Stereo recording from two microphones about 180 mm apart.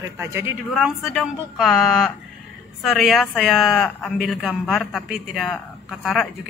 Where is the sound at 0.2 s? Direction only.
15° right (ahead or behind).